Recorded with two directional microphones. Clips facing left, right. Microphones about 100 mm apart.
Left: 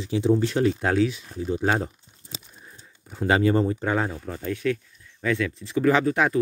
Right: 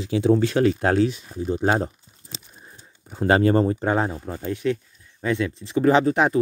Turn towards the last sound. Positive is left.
turn(degrees=-25)  # may be behind; listen again after turning